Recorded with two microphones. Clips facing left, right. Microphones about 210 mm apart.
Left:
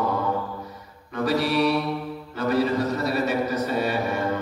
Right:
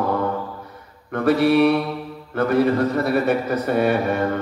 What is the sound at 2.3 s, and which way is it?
A man's voice, 55° right (ahead or behind).